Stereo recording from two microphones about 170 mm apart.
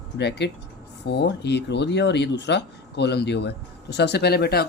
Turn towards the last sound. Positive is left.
turn(degrees=70)  # may be behind; listen again after turning